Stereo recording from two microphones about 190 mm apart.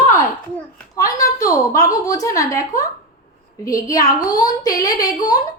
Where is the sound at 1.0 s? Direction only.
15° left (ahead or behind).